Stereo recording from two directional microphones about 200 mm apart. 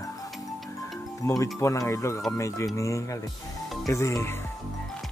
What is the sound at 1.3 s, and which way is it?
Speech, 15° left (ahead or behind).